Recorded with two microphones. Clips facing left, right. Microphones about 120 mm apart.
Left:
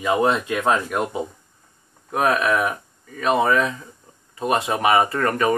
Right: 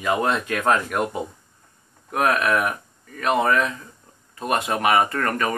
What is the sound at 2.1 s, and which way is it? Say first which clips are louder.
Speech: left 1 dB; 20° left (ahead or behind).